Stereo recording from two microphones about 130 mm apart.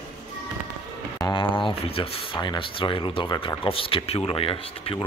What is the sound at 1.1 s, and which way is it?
Speech, 30° left (ahead or behind).